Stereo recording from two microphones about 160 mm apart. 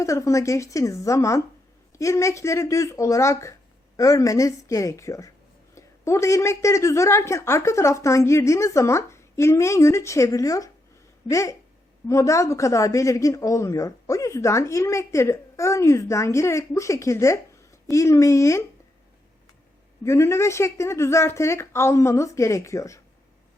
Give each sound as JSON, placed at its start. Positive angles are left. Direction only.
{"t": 0.0, "sound": "a woman's voice", "side_deg": 20}
{"t": 20.1, "sound": "a woman's voice", "side_deg": 20}